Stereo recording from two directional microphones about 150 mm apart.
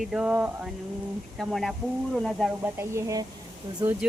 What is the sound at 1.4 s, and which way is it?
Speech, centre (ahead or behind).